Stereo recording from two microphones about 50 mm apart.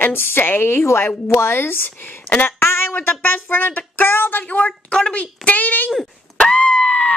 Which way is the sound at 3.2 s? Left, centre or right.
Left.